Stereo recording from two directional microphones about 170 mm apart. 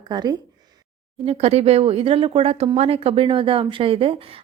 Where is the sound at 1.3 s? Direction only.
40° right (ahead or behind).